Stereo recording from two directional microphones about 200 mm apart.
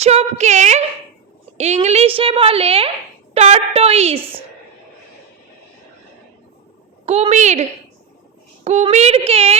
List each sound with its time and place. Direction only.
0.0 s a woman's voice: 30° right (ahead or behind)
4.2 s a woman's voice: 10° right (ahead or behind)
7.0 s speech: 30° right (ahead or behind)